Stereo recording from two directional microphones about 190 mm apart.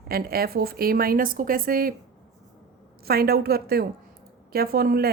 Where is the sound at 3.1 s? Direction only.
55° right (ahead or behind).